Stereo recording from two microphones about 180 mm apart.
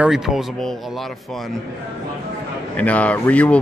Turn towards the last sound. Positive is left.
turn(degrees=5)  # may be behind; listen again after turning